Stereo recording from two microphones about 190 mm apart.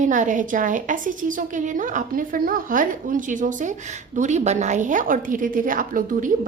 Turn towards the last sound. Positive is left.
turn(degrees=-45)  # may be behind; listen again after turning